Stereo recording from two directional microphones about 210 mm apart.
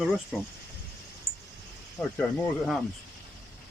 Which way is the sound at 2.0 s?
10° left (ahead or behind).